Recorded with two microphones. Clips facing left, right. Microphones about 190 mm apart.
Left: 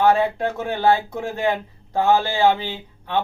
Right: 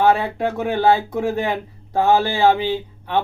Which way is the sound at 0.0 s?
15° right (ahead or behind).